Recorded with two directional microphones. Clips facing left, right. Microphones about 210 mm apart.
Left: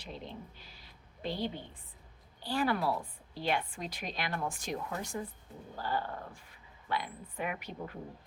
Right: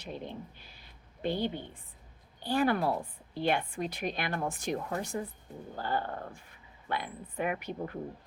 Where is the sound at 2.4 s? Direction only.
50° right (ahead or behind).